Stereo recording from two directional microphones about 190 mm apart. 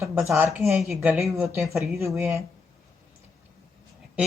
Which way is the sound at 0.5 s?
5° right (ahead or behind).